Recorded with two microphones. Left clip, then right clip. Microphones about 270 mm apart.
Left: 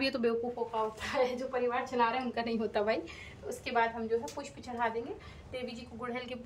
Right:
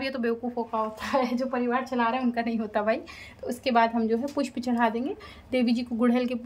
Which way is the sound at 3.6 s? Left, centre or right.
Right.